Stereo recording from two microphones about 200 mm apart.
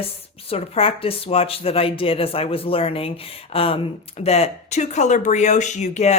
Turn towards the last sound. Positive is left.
turn(degrees=35)  # may be behind; listen again after turning